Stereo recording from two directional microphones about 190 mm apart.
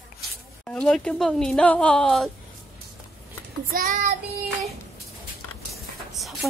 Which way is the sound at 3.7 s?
45° right (ahead or behind).